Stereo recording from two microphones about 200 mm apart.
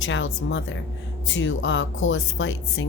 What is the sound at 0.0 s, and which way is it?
A woman's voice, 70° left (ahead or behind).